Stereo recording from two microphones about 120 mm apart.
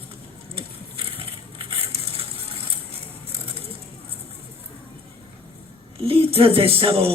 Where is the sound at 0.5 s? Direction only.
50° right (ahead or behind).